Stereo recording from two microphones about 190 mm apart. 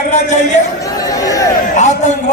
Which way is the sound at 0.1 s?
40° left (ahead or behind).